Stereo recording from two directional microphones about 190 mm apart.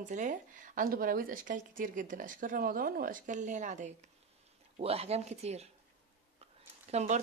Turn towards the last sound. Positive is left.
turn(degrees=-35)  # may be behind; listen again after turning